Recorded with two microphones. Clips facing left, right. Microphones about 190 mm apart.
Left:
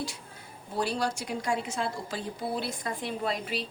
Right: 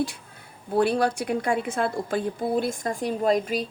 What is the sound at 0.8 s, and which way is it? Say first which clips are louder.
A woman's voice: right 8 dB; 55° right (ahead or behind).